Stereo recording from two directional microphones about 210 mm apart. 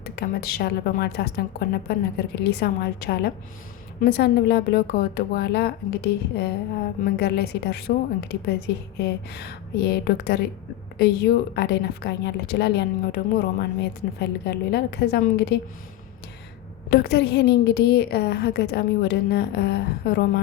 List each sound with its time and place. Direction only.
0.0 s a woman's voice: 50° left (ahead or behind)
7.0 s a woman's voice: 50° left (ahead or behind)
16.9 s a woman's voice: 50° left (ahead or behind)